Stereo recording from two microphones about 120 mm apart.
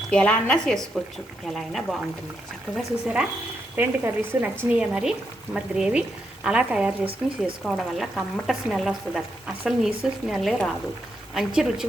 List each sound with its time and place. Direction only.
0.1 s a woman's voice: 10° left (ahead or behind)
3.8 s speech: 20° right (ahead or behind)
4.8 s speech: 5° right (ahead or behind)